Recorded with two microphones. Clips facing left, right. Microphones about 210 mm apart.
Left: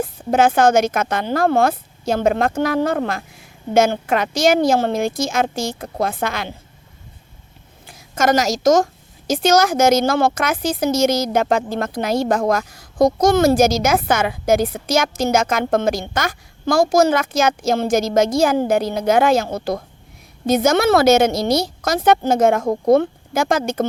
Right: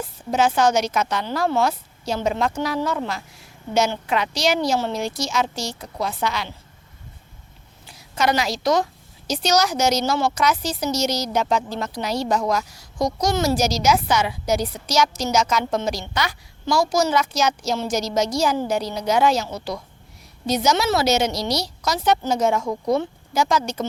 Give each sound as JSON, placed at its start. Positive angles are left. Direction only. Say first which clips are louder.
{"t": 0.0, "sound": "a woman's voice", "louder": "left 5 dB", "side_deg": 55}
{"t": 7.9, "sound": "a woman's voice", "louder": "left 4 dB", "side_deg": 50}